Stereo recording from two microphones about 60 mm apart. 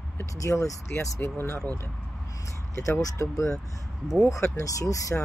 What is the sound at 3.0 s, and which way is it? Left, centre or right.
Speech, left.